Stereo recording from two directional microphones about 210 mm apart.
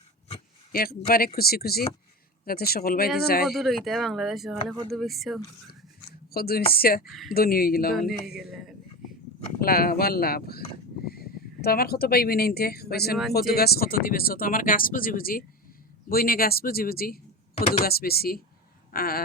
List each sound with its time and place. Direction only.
0.7 s speech: 45° left (ahead or behind)
3.5 s speech: centre (ahead or behind)
6.3 s speech: 45° left (ahead or behind)
7.1 s speech: centre (ahead or behind)
7.3 s speech: 45° left (ahead or behind)
8.4 s speech: centre (ahead or behind)
9.6 s speech: 45° left (ahead or behind)